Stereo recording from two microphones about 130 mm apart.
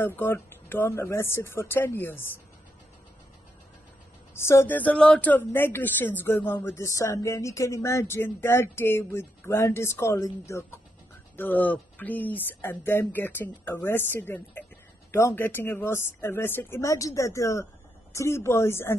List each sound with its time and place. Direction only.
0.0 s speech: 15° left (ahead or behind)
4.4 s a woman's voice: 20° left (ahead or behind)